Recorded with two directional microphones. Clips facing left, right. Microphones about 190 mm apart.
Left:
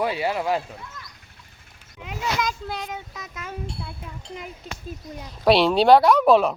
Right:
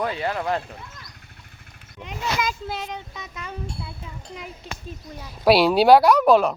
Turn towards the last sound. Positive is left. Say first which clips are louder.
# even
turn(degrees=0)  # may be behind; listen again after turning